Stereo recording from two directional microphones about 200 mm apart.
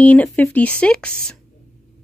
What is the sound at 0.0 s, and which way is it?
Speech, 5° left (ahead or behind).